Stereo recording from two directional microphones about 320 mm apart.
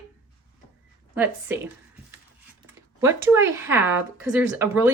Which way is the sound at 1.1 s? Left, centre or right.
Centre.